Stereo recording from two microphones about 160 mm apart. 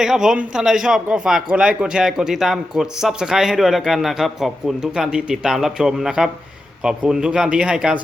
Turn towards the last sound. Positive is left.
turn(degrees=-5)  # may be behind; listen again after turning